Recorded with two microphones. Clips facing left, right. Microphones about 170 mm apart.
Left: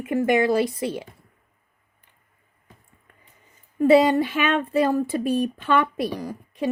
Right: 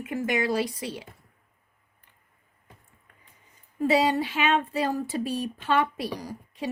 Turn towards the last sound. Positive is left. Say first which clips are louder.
# left 6 dB
turn(degrees=55)  # may be behind; listen again after turning